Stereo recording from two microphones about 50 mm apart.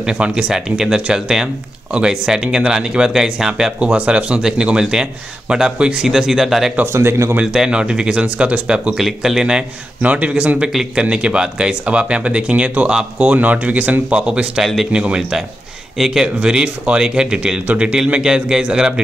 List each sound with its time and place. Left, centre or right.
0.0 s speech: centre
3.9 s speech: right; by 6.7 s centre
6.9 s a man's voice: right
7.5 s speech: centre
10.0 s speech: right
15.1 s speech: centre